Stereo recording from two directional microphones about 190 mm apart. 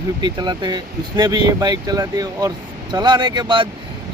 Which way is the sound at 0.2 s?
25° right (ahead or behind).